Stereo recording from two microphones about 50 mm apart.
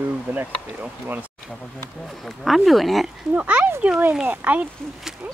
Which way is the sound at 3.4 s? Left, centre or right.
Right.